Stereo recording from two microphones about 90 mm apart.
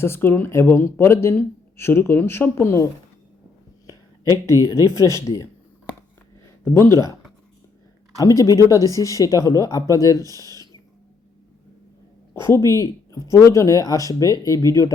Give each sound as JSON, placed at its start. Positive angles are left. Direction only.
{"t": 0.0, "sound": "speech", "side_deg": 25}
{"t": 3.8, "sound": "a sound", "side_deg": 40}
{"t": 4.9, "sound": "speech", "side_deg": 35}
{"t": 6.7, "sound": "speech", "side_deg": 30}
{"t": 8.2, "sound": "speech", "side_deg": 40}
{"t": 10.2, "sound": "speech", "side_deg": -45}
{"t": 12.5, "sound": "speech", "side_deg": 35}